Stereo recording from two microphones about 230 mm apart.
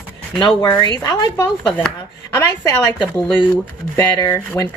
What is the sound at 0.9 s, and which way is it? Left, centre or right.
Speech, centre.